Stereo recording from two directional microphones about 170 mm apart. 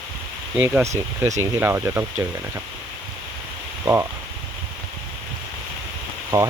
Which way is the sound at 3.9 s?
15° right (ahead or behind).